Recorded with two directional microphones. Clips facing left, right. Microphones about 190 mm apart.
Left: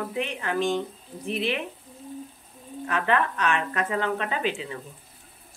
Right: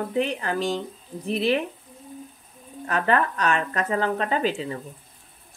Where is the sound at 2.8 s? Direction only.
40° right (ahead or behind).